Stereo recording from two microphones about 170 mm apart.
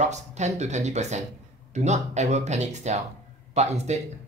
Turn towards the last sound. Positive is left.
turn(degrees=-40)  # may be behind; listen again after turning